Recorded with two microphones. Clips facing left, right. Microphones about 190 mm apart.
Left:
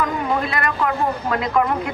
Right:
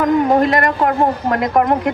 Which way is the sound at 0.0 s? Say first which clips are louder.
Right 9 dB; 45° right (ahead or behind).